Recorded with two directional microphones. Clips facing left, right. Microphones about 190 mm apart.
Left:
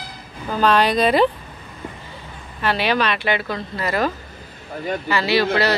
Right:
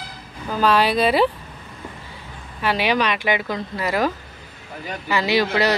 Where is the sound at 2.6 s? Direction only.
10° right (ahead or behind).